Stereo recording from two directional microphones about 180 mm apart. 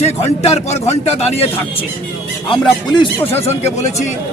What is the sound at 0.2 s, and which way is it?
Speech, 35° left (ahead or behind).